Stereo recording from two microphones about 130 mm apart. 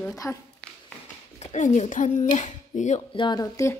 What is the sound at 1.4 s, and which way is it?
Speech, 65° left (ahead or behind).